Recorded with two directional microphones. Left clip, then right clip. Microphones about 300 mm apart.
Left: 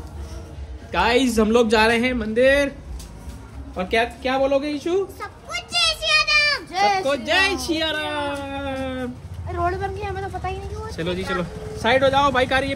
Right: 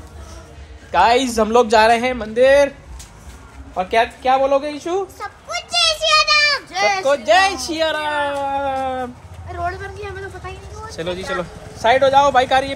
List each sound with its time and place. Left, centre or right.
0.9 s a man's voice: centre
3.7 s a sound: centre
6.7 s speech: centre
7.1 s speech: centre
9.5 s a sound: left
10.9 s speech: centre